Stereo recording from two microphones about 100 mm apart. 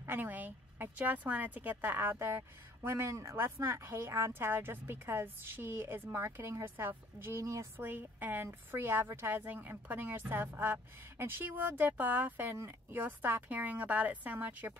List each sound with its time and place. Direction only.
0.0 s speech: 20° right (ahead or behind)